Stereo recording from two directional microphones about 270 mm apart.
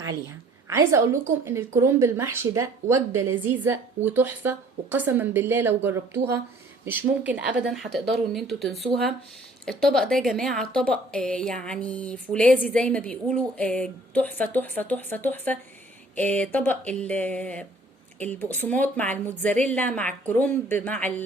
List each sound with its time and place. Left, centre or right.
0.1 s a woman's voice: centre